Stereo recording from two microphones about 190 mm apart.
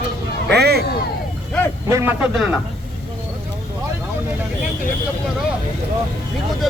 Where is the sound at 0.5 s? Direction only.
55° right (ahead or behind).